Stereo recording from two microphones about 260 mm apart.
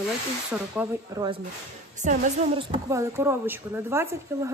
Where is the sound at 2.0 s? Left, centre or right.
Right.